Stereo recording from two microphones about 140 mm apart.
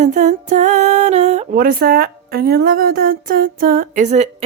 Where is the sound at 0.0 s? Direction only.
60° right (ahead or behind).